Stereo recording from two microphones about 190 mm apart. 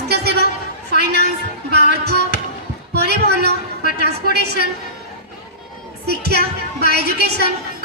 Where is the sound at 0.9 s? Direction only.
60° right (ahead or behind).